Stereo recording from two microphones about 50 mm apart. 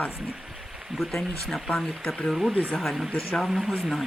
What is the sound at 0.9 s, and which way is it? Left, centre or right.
Speech, centre.